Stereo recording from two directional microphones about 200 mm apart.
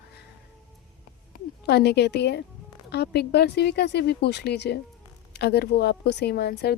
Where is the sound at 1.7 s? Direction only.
55° left (ahead or behind).